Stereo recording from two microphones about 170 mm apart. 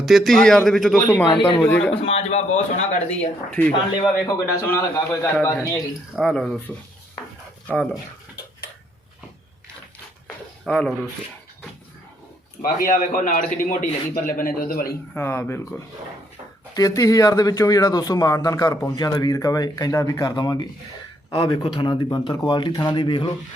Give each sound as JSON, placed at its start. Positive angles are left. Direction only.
{"t": 0.0, "sound": "a man's voice", "side_deg": 0}
{"t": 0.9, "sound": "a man's voice", "side_deg": 15}
{"t": 2.0, "sound": "speech", "side_deg": 40}
{"t": 3.5, "sound": "a man's voice", "side_deg": 5}
{"t": 6.1, "sound": "a man's voice", "side_deg": 0}
{"t": 10.7, "sound": "a man's voice", "side_deg": 5}
{"t": 12.6, "sound": "a man's voice", "side_deg": 55}
{"t": 15.1, "sound": "a man's voice", "side_deg": 15}